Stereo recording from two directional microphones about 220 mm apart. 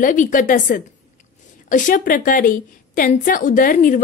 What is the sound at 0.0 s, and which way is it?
A woman's voice, 35° left (ahead or behind).